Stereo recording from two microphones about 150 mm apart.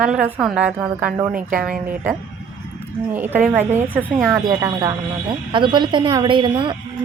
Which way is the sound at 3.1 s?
15° right (ahead or behind).